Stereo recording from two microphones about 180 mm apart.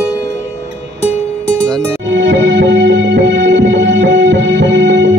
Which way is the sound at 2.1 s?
80° right.